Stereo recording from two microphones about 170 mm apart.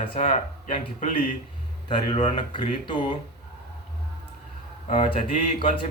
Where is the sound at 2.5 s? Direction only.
30° left (ahead or behind).